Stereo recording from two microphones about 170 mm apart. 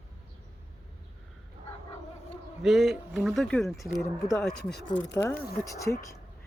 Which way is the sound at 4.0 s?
20° left (ahead or behind).